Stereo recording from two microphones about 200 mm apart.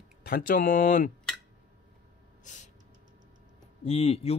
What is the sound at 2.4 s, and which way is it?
Gasp, 40° left (ahead or behind).